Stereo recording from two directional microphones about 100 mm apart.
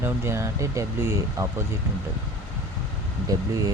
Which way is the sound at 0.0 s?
25° right (ahead or behind).